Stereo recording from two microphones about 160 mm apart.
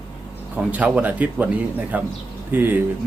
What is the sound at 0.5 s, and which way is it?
Speech, 10° right (ahead or behind).